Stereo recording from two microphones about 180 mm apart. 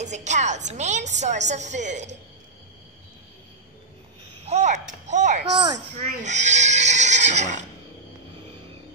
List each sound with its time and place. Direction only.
0.0 s a woman's voice: 40° right (ahead or behind)
4.5 s a woman's voice: 40° right (ahead or behind)